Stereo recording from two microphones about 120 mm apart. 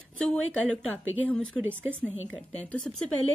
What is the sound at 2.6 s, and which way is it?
Speech, 10° left (ahead or behind).